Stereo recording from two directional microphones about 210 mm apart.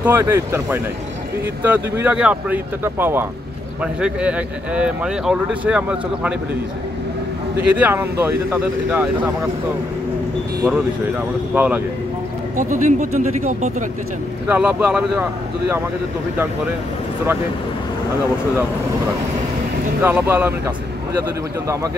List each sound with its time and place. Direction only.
0.0 s speech: 10° right (ahead or behind)
7.6 s speech: 5° right (ahead or behind)
11.5 s speech: 5° right (ahead or behind)
12.5 s speech: 35° right (ahead or behind)
14.5 s speech: 5° right (ahead or behind)
20.0 s speech: 10° right (ahead or behind)